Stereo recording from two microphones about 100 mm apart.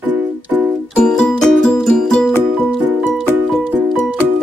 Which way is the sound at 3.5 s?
5° left (ahead or behind).